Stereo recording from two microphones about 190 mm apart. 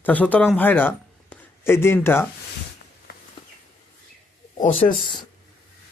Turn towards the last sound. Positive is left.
turn(degrees=25)  # may be behind; listen again after turning